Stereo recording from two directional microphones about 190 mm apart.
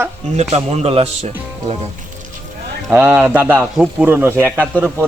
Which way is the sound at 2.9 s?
5° right (ahead or behind).